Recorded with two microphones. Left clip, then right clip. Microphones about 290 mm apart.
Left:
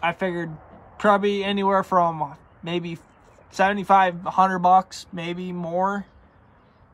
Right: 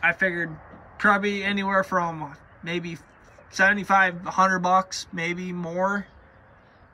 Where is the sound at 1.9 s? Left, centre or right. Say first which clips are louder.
Left 5 dB; left.